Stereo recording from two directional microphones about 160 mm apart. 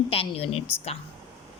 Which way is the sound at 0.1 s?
35° left (ahead or behind).